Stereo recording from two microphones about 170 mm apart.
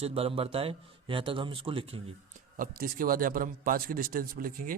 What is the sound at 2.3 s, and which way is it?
Speech, 55° right (ahead or behind).